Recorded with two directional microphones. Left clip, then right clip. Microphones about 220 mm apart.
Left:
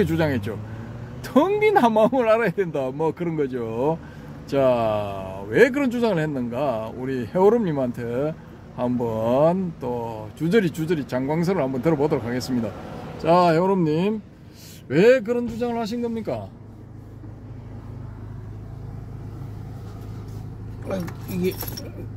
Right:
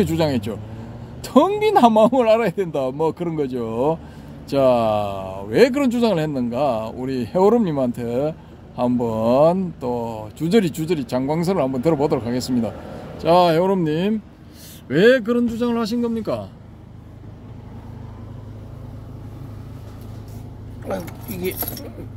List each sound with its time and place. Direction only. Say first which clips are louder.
0.0 s a man's voice: right 2 dB; 25° right (ahead or behind)
20.9 s speech: right 2 dB; centre (ahead or behind)